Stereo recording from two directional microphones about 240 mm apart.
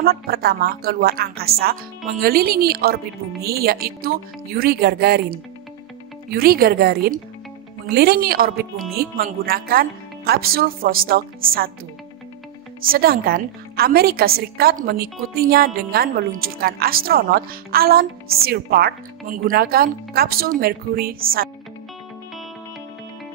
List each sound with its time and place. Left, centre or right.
0.0 s a woman's voice: right
12.8 s a woman's voice: right